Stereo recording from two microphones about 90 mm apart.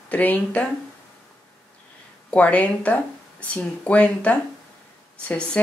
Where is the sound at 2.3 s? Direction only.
15° left (ahead or behind).